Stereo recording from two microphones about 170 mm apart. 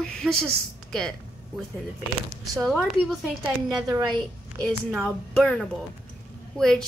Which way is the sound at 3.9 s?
25° right (ahead or behind).